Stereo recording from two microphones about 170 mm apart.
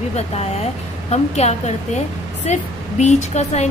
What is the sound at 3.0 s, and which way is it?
Speech, 40° left (ahead or behind).